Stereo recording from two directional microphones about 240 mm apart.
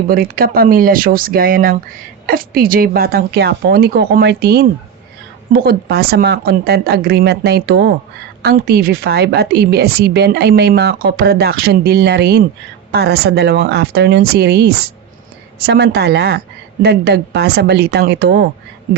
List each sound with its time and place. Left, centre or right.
0.1 s speech: right